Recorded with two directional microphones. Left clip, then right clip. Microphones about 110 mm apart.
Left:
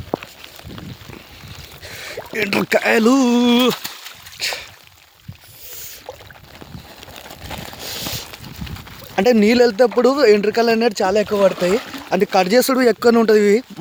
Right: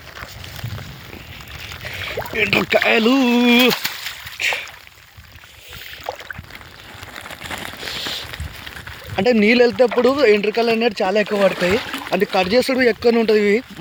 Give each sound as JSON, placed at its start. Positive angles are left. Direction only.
{"t": 1.9, "sound": "rowboat", "side_deg": 45}
{"t": 2.5, "sound": "speech", "side_deg": 70}
{"t": 3.2, "sound": "speech", "side_deg": 40}
{"t": 6.1, "sound": "boat", "side_deg": -40}
{"t": 7.8, "sound": "a sound", "side_deg": 60}
{"t": 9.1, "sound": "speech", "side_deg": 45}
{"t": 10.0, "sound": "speech", "side_deg": 50}
{"t": 10.8, "sound": "speech", "side_deg": 50}
{"t": 12.1, "sound": "speech", "side_deg": 70}